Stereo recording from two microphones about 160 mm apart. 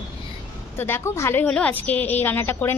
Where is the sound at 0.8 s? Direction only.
15° left (ahead or behind).